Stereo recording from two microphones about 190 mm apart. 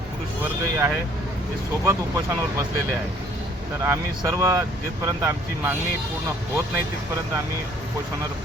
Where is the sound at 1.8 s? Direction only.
15° right (ahead or behind).